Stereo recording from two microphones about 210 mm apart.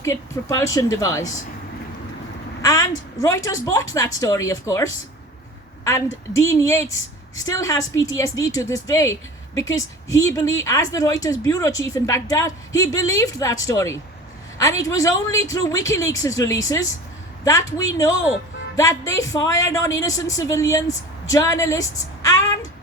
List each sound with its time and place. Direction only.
0.0 s a woman's voice: 15° left (ahead or behind)
2.6 s a woman's voice: 15° left (ahead or behind)